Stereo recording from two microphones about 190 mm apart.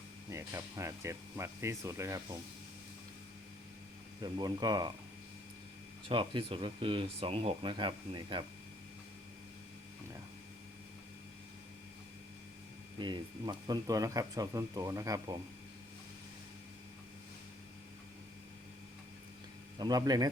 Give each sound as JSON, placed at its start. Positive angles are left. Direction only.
{"t": 0.3, "sound": "speech", "side_deg": -15}
{"t": 4.2, "sound": "speech", "side_deg": -20}
{"t": 6.1, "sound": "speech", "side_deg": -30}
{"t": 13.0, "sound": "speech", "side_deg": -25}
{"t": 19.8, "sound": "speech", "side_deg": -20}